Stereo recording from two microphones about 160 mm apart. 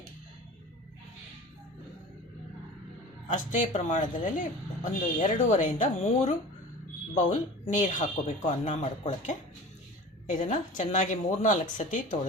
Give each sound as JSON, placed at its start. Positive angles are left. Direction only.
{"t": 3.2, "sound": "speech", "side_deg": 50}